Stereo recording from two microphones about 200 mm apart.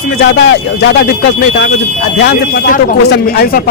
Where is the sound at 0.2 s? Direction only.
60° left (ahead or behind).